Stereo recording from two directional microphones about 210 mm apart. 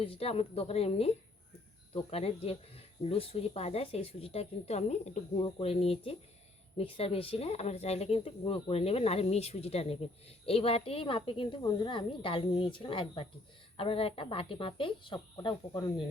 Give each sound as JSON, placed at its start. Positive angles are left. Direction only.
{"t": 0.0, "sound": "speech", "side_deg": 25}